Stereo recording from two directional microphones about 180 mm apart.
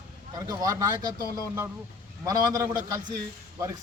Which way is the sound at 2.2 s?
20° right (ahead or behind).